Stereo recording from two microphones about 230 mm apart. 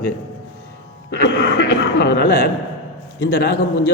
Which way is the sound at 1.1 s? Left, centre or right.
Left.